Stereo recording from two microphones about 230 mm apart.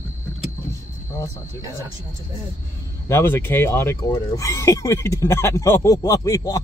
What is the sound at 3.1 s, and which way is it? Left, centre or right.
Speech, centre.